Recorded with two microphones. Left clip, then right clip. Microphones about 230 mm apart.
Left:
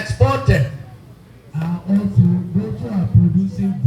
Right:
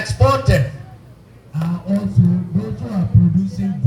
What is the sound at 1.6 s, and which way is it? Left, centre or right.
Speech, right.